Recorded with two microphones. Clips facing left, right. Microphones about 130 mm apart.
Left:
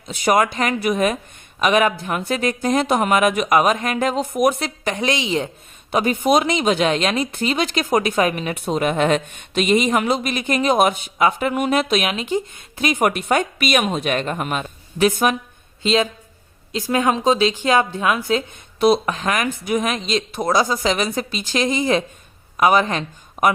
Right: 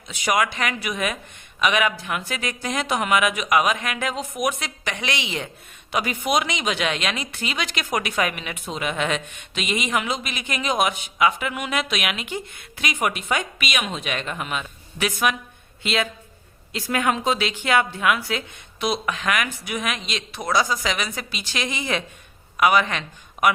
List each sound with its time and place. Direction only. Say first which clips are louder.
0.1 s speech: left 5 dB; 35° left (ahead or behind)
5.9 s speech: left 6 dB; 30° left (ahead or behind); by 7.7 s 45° left (ahead or behind)
7.9 s speech: left 6 dB; 30° left (ahead or behind)
8.7 s speech: left 7 dB; 45° left (ahead or behind)
16.9 s speech: left 5 dB; 25° left (ahead or behind)
17.6 s speech: left 3 dB; 40° left (ahead or behind)
18.2 s speech: left 8 dB; 50° left (ahead or behind)
20.6 s speech: left 3 dB; 25° left (ahead or behind)
21.2 s speech: left 8 dB; 45° left (ahead or behind)